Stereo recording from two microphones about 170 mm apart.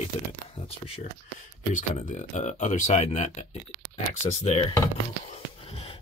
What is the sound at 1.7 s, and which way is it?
Speech, 50° left (ahead or behind).